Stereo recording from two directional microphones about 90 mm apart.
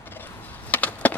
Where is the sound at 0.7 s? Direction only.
15° left (ahead or behind).